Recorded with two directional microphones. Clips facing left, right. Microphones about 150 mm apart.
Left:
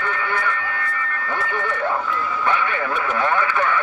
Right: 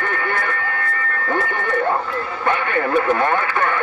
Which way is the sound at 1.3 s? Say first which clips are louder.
Right 4 dB; 45° right (ahead or behind).